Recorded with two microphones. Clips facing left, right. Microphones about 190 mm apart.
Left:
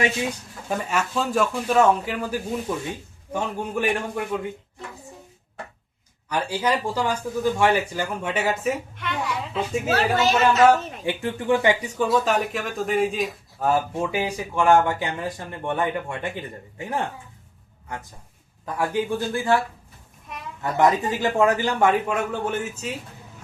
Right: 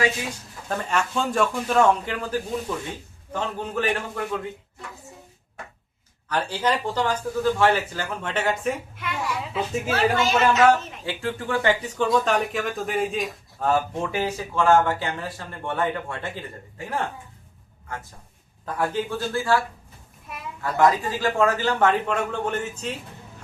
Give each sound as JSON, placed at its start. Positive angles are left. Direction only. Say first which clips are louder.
{"t": 0.7, "sound": "a man's voice", "louder": "even", "side_deg": 10}
{"t": 6.2, "sound": "speech", "louder": "even", "side_deg": 10}
{"t": 9.9, "sound": "speech", "louder": "left 1 dB", "side_deg": 40}
{"t": 11.0, "sound": "speech", "louder": "left 3 dB", "side_deg": 15}
{"t": 18.6, "sound": "speech", "louder": "left 1 dB", "side_deg": 10}